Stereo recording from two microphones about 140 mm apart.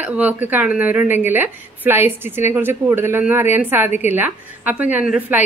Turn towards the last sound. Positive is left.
turn(degrees=-10)  # may be behind; listen again after turning